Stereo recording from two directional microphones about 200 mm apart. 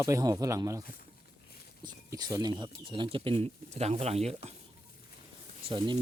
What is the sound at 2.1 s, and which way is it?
Speech, 20° right (ahead or behind).